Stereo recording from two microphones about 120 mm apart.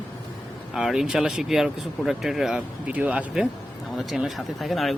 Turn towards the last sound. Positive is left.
turn(degrees=0)  # may be behind; listen again after turning